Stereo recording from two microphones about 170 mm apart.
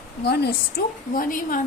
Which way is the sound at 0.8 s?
65° left (ahead or behind).